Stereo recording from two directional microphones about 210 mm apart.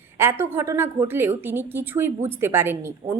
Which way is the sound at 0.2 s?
10° right (ahead or behind).